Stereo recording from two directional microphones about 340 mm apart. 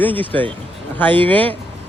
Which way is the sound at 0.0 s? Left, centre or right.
Centre.